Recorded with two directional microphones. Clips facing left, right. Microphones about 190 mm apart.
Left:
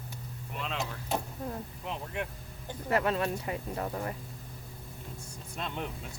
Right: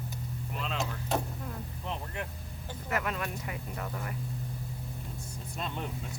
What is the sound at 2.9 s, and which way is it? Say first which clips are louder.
Speech: left 5 dB; 30° left (ahead or behind).